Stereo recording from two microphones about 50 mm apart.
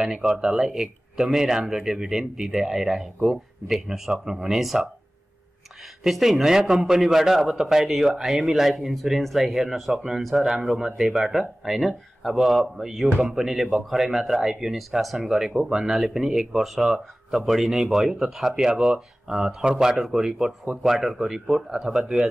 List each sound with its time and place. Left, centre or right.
0.0 s speech: centre
6.0 s a man's voice: centre